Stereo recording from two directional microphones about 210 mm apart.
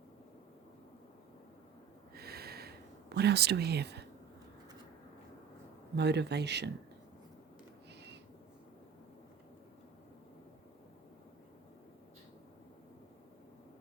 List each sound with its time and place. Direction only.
2.1 s snort: 50° right (ahead or behind)
3.2 s speech: 50° right (ahead or behind)
6.0 s speech: 55° right (ahead or behind)